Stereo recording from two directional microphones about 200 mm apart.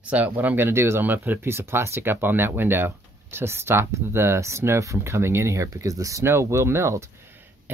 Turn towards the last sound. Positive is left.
turn(degrees=-10)  # may be behind; listen again after turning